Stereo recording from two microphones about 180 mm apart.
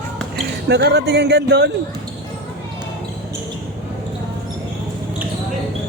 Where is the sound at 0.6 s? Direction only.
65° right (ahead or behind).